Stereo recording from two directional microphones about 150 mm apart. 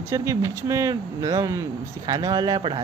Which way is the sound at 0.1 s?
20° right (ahead or behind).